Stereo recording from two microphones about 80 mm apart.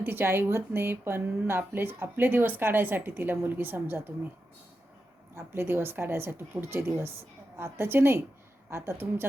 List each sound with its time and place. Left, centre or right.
0.0 s a woman's voice: right
5.3 s a woman's voice: right